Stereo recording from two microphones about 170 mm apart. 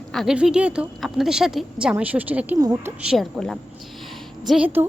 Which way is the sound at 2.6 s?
20° right (ahead or behind).